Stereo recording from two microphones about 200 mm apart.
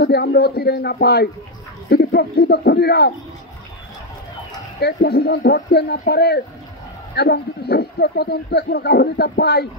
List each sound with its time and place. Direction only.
0.0 s speech: 55° left (ahead or behind)
4.7 s speech: 55° left (ahead or behind)